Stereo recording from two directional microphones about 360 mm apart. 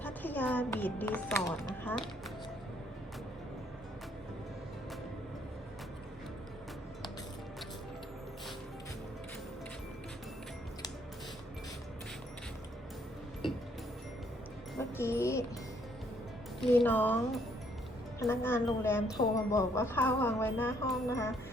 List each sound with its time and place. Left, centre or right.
0.0 s speech: centre
14.9 s a woman's voice: centre
16.6 s a woman's voice: centre